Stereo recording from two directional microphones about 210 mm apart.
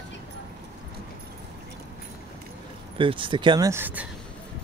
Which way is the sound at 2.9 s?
25° right (ahead or behind).